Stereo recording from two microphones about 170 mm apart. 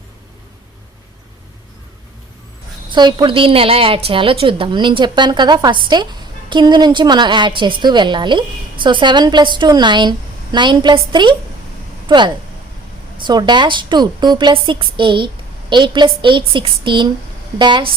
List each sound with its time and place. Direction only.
2.9 s a woman's voice: 25° right (ahead or behind)